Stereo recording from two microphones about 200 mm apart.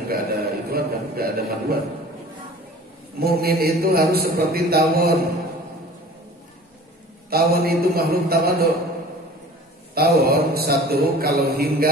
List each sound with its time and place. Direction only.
0.1 s a sound: 50° right (ahead or behind)
3.2 s a man's voice: 50° right (ahead or behind)
7.2 s a man's voice: 50° right (ahead or behind)
9.9 s a man's voice: 50° right (ahead or behind)